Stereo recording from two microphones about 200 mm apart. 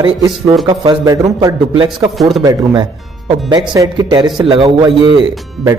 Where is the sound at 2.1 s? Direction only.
Centre (ahead or behind).